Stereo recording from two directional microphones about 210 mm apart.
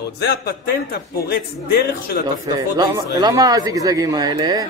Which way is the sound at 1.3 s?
45° left (ahead or behind).